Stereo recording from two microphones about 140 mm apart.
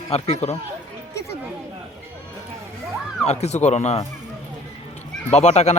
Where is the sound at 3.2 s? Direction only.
50° left (ahead or behind).